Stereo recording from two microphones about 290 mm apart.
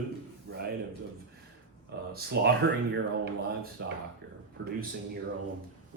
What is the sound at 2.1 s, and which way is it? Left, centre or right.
Speech, right.